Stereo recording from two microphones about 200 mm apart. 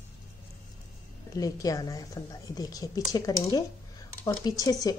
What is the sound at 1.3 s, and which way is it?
A woman's voice, 15° left (ahead or behind).